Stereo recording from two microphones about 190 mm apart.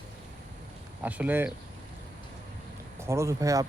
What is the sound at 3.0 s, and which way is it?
Speech, 15° right (ahead or behind).